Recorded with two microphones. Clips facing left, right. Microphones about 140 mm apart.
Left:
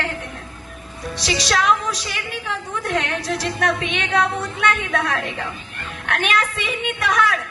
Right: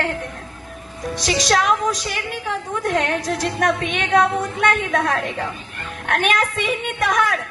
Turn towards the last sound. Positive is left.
turn(degrees=-45)  # may be behind; listen again after turning